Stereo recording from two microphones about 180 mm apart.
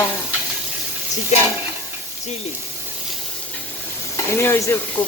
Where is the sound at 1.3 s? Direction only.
40° left (ahead or behind).